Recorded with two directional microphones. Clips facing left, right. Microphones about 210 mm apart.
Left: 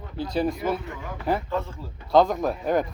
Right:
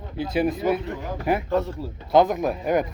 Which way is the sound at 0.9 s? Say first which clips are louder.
Right 5 dB; 40° right (ahead or behind).